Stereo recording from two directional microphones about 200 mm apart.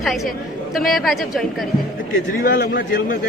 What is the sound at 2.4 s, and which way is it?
Speech, 50° left (ahead or behind).